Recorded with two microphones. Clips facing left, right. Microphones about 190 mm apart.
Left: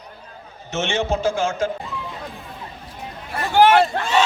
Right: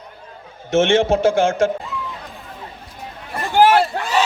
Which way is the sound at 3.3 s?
5° right (ahead or behind).